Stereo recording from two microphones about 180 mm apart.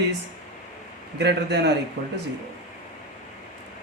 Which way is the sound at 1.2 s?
70° right (ahead or behind).